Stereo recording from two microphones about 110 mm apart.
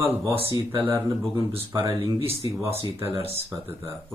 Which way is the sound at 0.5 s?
20° right (ahead or behind).